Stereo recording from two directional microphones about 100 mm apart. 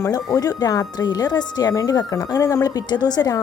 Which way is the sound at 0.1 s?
40° left (ahead or behind).